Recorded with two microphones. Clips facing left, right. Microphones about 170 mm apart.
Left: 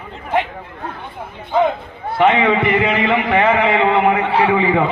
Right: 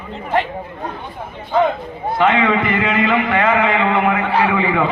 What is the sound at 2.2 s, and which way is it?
A man's voice, 25° left (ahead or behind).